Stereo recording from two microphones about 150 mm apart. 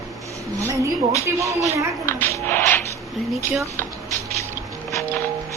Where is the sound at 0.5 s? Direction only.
20° right (ahead or behind).